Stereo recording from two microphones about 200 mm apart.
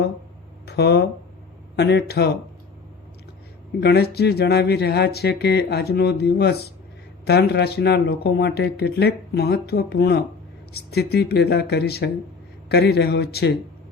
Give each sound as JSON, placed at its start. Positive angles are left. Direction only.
{"t": 0.6, "sound": "speech", "side_deg": 55}
{"t": 3.8, "sound": "speech", "side_deg": 55}